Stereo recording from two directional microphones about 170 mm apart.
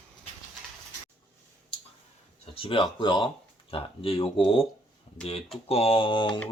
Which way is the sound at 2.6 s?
30° left (ahead or behind).